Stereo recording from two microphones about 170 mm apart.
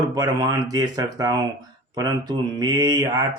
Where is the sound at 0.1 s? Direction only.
25° right (ahead or behind).